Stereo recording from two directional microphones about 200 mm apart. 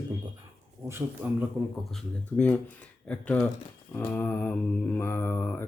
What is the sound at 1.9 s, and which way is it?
Speech, 5° left (ahead or behind).